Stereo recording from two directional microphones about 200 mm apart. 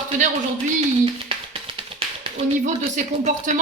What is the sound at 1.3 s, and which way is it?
Speech, 25° right (ahead or behind).